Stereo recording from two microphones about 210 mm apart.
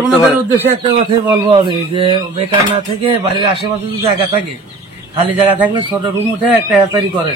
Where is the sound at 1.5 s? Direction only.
25° right (ahead or behind).